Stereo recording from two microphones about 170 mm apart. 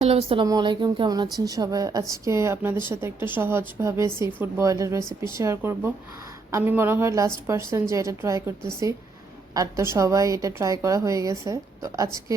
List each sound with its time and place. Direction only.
0.0 s a woman's voice: 35° right (ahead or behind); by 12.1 s 20° right (ahead or behind)